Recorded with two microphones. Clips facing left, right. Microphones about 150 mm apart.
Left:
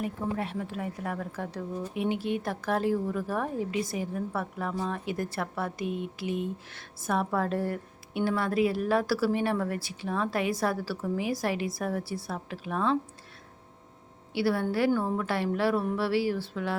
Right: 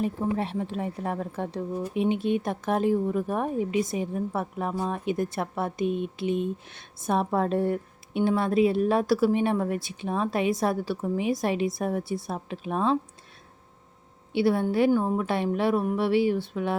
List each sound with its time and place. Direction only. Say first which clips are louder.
0.0 s speech: right 4 dB; 25° right (ahead or behind)
14.3 s speech: right 4 dB; 20° right (ahead or behind)